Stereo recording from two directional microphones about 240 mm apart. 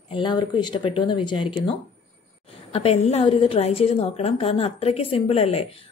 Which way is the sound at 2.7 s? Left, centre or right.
Left.